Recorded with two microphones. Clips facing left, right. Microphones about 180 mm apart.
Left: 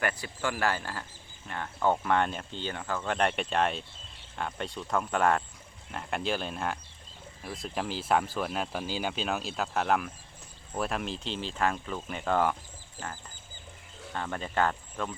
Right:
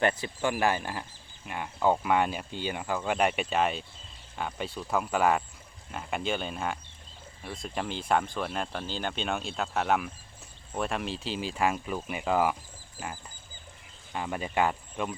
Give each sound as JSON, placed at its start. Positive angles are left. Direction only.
{"t": 0.0, "sound": "speech", "side_deg": -20}